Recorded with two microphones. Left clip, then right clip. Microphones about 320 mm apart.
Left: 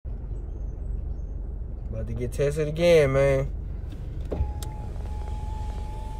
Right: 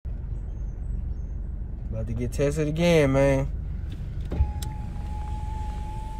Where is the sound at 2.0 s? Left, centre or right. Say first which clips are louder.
Even; centre.